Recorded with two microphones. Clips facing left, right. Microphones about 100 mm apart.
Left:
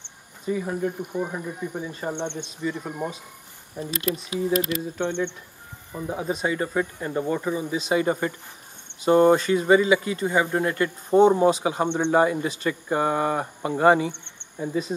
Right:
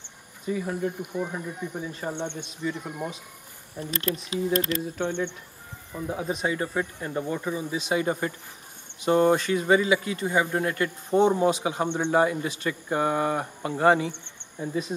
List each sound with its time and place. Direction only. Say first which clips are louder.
0.5 s speech: left 2 dB; 5° left (ahead or behind)
1.8 s speech: left 2 dB; centre (ahead or behind)
2.0 s speech: left 3 dB; 20° left (ahead or behind)
2.4 s speech: left 2 dB; centre (ahead or behind)
3.7 s speech: left 2 dB; 10° left (ahead or behind)
5.0 s speech: left 3 dB; 10° right (ahead or behind)
5.9 s speech: left 2 dB; 5° left (ahead or behind)
7.7 s speech: left 3 dB; centre (ahead or behind)
11.8 s speech: left 3 dB; 20° left (ahead or behind)
12.1 s speech: left 2 dB; 5° left (ahead or behind)